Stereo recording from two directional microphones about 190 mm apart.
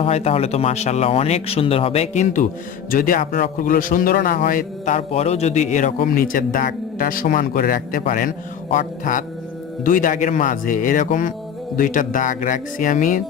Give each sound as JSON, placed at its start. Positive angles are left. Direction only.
{"t": 0.0, "sound": "a man's voice", "side_deg": 30}
{"t": 4.9, "sound": "a man's voice", "side_deg": 35}